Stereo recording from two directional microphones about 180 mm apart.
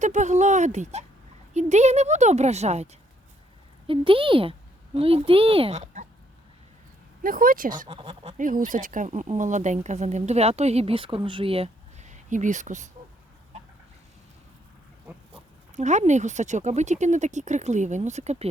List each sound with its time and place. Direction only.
0.0 s a sound: 40° right (ahead or behind)
1.5 s speech: 40° right (ahead or behind)
7.2 s speech: 50° right (ahead or behind)
7.9 s speech: 30° right (ahead or behind)
8.4 s speech: 45° right (ahead or behind)
15.7 s speech: 40° right (ahead or behind)